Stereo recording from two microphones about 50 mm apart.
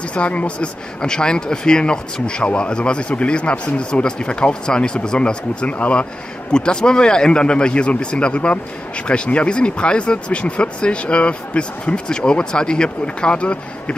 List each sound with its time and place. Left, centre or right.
0.1 s a man's voice: left
1.0 s a man's voice: centre